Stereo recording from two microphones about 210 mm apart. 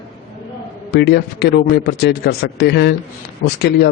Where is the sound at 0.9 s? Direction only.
50° left (ahead or behind).